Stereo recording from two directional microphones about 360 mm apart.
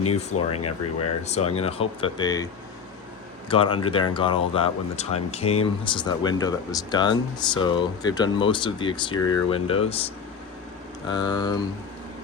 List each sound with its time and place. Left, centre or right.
0.3 s speech: left
1.5 s speech: centre
3.5 s speech: centre
11.1 s speech: centre